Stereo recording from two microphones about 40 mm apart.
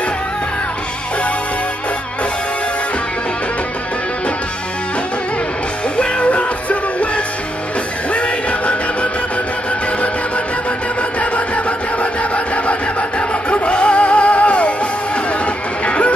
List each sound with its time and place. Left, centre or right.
5.9 s music: left
8.1 s music: left
11.0 s music: left